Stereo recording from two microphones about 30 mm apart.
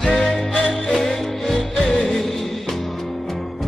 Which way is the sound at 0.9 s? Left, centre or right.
Centre.